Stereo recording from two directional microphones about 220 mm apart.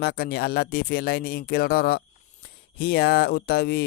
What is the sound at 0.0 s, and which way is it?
Speech, 45° left (ahead or behind).